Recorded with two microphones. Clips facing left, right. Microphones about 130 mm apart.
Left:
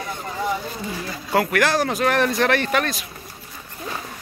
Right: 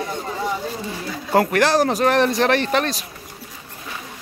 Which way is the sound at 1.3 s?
35° right (ahead or behind).